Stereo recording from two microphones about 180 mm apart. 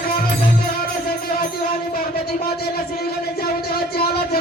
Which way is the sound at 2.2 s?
60° left (ahead or behind).